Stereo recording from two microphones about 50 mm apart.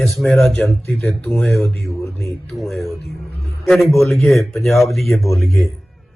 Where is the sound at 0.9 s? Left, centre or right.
Left.